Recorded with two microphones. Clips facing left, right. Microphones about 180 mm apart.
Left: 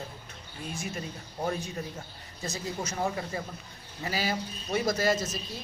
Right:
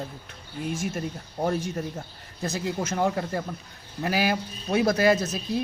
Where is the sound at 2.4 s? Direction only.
60° right (ahead or behind).